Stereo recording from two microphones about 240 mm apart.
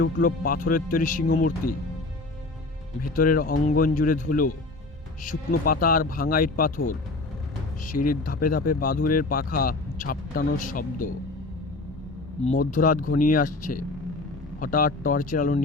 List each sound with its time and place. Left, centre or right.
0.0 s speech: left
3.2 s speech: left
8.2 s speech: left
12.5 s speech: left